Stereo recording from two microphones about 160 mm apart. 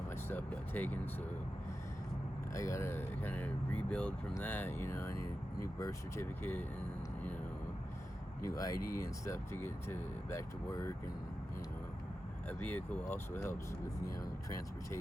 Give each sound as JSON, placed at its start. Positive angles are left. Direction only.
{"t": 0.3, "sound": "speech", "side_deg": 10}
{"t": 2.5, "sound": "speech", "side_deg": 20}
{"t": 8.4, "sound": "speech", "side_deg": 20}
{"t": 12.5, "sound": "speech", "side_deg": 10}